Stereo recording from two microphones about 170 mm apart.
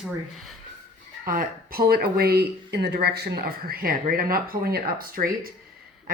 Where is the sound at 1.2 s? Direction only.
55° right (ahead or behind).